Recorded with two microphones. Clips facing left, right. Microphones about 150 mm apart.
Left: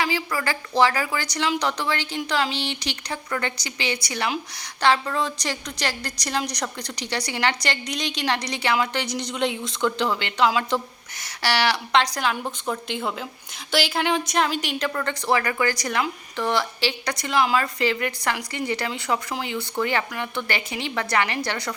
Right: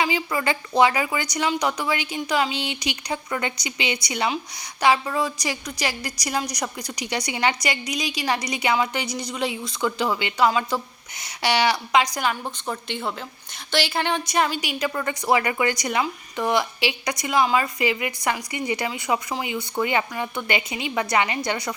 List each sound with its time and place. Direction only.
0.0 s a woman's voice: 20° right (ahead or behind)
11.4 s a woman's voice: 15° right (ahead or behind)
15.3 s a woman's voice: 20° right (ahead or behind)